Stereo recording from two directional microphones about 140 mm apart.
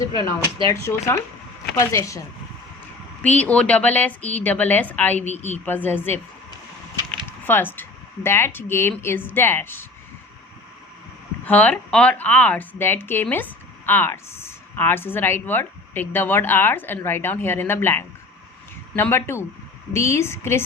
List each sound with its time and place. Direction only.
0.7 s a woman's voice: 20° left (ahead or behind)
3.2 s a woman's voice: 10° left (ahead or behind)
7.3 s speech: 15° left (ahead or behind)
11.4 s a woman's voice: 10° left (ahead or behind)